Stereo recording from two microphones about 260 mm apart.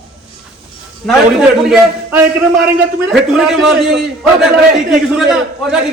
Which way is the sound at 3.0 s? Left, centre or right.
Centre.